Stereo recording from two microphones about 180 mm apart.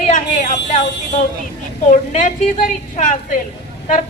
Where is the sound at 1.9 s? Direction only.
45° left (ahead or behind).